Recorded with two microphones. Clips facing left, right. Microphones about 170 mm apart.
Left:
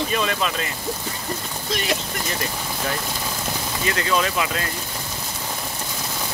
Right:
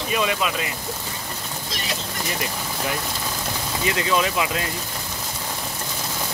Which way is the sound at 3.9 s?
15° right (ahead or behind).